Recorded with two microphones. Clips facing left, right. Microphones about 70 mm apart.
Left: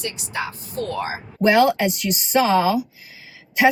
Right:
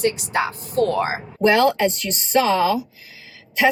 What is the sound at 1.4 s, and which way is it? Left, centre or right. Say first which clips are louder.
Speech: even; centre.